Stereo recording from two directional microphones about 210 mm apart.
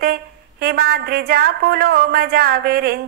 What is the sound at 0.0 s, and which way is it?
A woman's voice, 45° right (ahead or behind).